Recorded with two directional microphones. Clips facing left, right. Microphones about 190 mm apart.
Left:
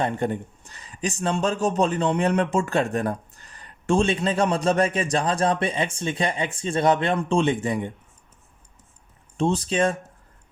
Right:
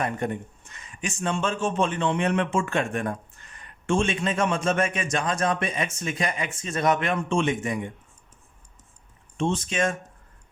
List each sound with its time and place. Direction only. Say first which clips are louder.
0.0 s speech: left 3 dB; 30° left (ahead or behind)
9.4 s speech: left 3 dB; 35° left (ahead or behind)